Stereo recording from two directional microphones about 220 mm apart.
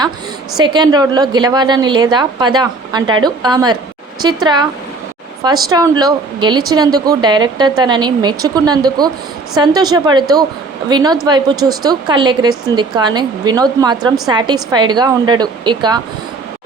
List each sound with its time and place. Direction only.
0.5 s a woman's voice: 20° right (ahead or behind)
5.6 s a woman's voice: 15° right (ahead or behind)